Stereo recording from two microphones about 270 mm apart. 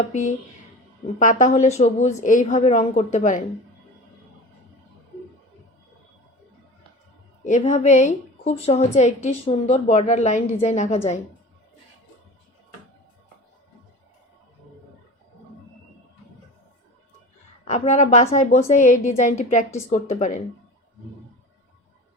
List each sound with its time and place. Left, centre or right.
0.1 s a woman's voice: left
7.4 s a woman's voice: left
17.7 s a woman's voice: left